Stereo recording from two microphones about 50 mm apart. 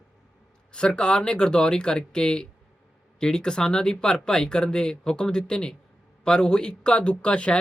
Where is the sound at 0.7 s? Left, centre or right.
Centre.